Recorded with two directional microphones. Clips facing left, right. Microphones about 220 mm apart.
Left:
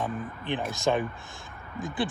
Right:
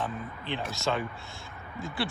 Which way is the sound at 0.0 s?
15° left (ahead or behind).